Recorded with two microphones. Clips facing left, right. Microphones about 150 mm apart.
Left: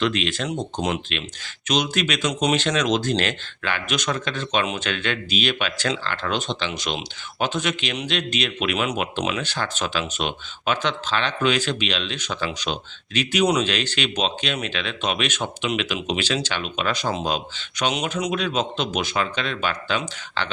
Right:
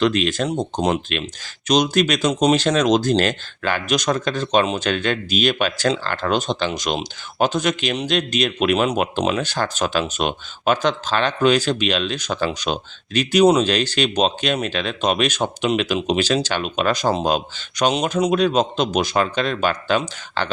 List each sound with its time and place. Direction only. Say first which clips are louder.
0.0 s speech: right 5 dB; 45° right (ahead or behind)